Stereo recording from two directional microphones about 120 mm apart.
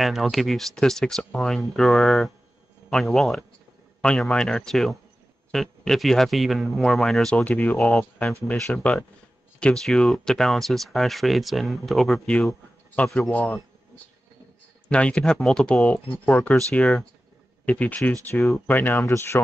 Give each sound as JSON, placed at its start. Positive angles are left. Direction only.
{"t": 0.0, "sound": "speech", "side_deg": 0}
{"t": 14.9, "sound": "speech", "side_deg": 10}